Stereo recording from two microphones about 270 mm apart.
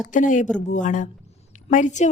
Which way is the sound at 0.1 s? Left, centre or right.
Left.